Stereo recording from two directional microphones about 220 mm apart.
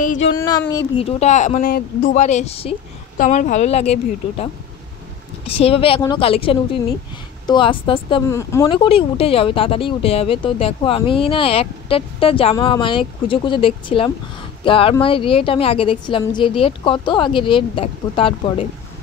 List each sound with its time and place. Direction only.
0.4 s speech: 15° left (ahead or behind)
1.0 s speech: 30° left (ahead or behind)